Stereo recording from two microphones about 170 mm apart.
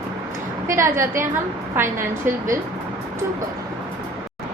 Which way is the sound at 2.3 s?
10° right (ahead or behind).